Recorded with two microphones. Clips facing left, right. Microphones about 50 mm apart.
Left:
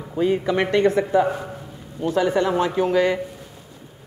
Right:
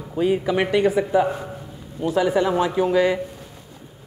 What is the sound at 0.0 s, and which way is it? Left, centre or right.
Speech, centre.